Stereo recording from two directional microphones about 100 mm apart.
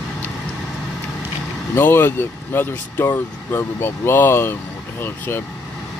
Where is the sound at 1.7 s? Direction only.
25° left (ahead or behind).